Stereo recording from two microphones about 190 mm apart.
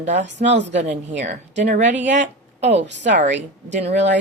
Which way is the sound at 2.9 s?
70° right (ahead or behind).